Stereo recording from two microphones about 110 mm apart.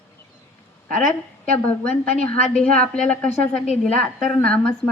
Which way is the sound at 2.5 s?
10° left (ahead or behind).